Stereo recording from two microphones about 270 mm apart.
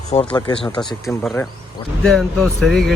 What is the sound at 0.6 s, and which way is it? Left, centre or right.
Speech, centre.